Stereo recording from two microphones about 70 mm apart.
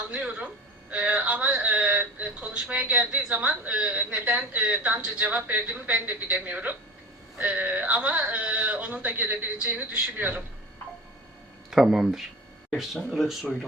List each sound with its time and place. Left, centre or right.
0.1 s speech: centre
3.3 s a woman's voice: right
11.7 s speech: centre